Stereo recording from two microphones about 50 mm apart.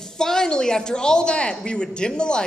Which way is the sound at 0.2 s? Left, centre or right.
Centre.